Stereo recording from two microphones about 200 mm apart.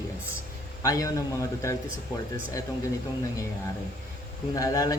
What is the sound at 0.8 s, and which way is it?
Speech, 15° left (ahead or behind).